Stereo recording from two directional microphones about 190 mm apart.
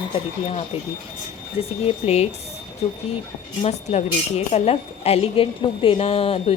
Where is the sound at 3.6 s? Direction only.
35° left (ahead or behind).